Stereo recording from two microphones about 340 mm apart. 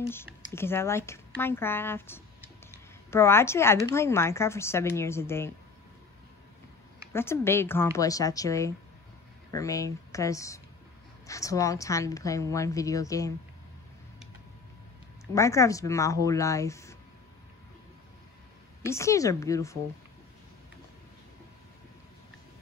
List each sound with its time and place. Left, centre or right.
0.0 s speech: centre
7.1 s a woman's voice: centre
15.3 s a woman's voice: centre
18.9 s a woman's voice: centre